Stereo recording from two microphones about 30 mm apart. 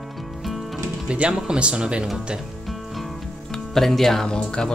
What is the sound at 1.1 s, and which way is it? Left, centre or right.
Speech, right.